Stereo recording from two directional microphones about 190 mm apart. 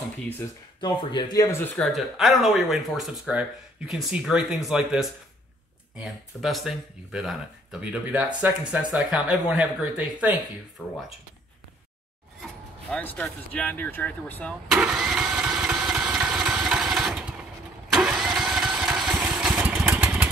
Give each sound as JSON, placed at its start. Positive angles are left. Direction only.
{"t": 0.7, "sound": "speech", "side_deg": 20}
{"t": 1.8, "sound": "speech", "side_deg": 0}
{"t": 10.8, "sound": "speech", "side_deg": 10}
{"t": 12.9, "sound": "speech", "side_deg": 10}
{"t": 14.7, "sound": "engine starting", "side_deg": -5}